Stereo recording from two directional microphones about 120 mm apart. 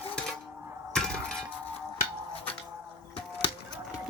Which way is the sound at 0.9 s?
5° left (ahead or behind).